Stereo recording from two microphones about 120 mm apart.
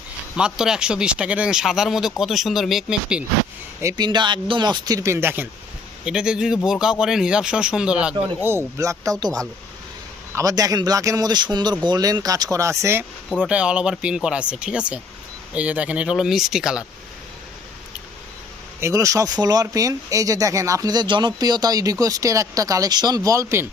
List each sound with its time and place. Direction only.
0.3 s speech: 5° right (ahead or behind)
3.8 s speech: 30° right (ahead or behind)
6.1 s speech: 5° right (ahead or behind)
8.4 s speech: 25° right (ahead or behind)
13.5 s speech: 10° right (ahead or behind)
18.8 s speech: 25° right (ahead or behind)